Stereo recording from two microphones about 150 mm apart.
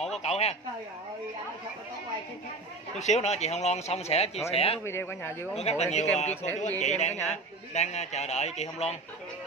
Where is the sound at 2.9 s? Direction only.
50° left (ahead or behind).